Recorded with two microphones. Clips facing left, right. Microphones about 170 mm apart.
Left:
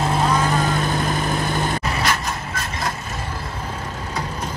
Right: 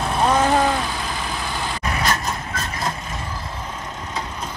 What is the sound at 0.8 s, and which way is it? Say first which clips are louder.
Vehicle: left 6 dB; 50° left (ahead or behind).